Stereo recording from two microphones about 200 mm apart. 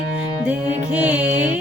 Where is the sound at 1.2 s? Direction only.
40° right (ahead or behind).